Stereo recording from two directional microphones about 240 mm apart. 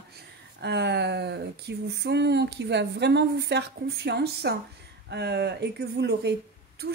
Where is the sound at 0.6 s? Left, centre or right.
Right.